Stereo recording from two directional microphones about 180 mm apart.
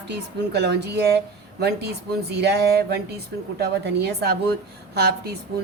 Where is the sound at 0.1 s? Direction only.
65° right (ahead or behind).